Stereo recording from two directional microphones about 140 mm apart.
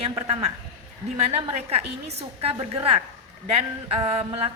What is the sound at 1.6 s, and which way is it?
A woman's voice, 45° right (ahead or behind).